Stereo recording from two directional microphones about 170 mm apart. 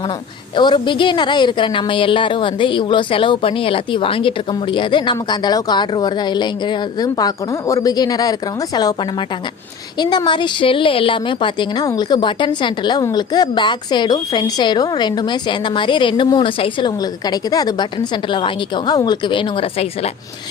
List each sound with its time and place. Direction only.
0.5 s a woman's voice: 25° left (ahead or behind)
10.0 s a woman's voice: 25° left (ahead or behind)